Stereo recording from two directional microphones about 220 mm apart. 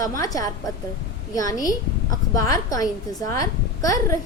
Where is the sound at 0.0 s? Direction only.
15° left (ahead or behind).